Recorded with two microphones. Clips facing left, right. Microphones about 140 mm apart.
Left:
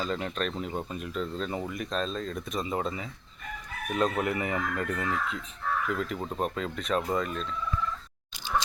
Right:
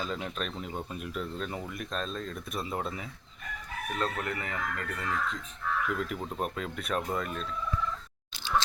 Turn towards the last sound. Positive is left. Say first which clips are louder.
# left 3 dB
turn(degrees=0)  # may be behind; listen again after turning